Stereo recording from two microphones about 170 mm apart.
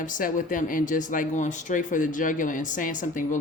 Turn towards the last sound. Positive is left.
turn(degrees=50)  # may be behind; listen again after turning